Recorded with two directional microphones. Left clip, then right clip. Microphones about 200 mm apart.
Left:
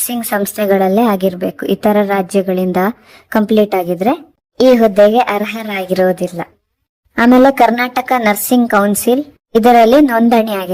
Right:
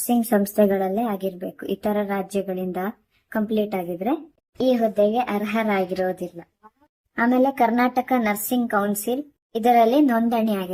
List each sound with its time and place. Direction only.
0.1 s a woman's voice: 45° left (ahead or behind)